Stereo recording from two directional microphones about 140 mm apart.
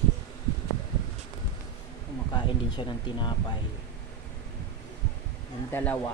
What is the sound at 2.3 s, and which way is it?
Speech, 30° left (ahead or behind).